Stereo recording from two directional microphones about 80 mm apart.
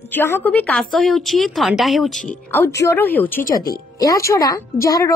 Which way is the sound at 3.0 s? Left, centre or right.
Left.